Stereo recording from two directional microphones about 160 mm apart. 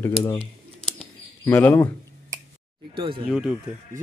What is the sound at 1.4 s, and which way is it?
Speech, 15° left (ahead or behind).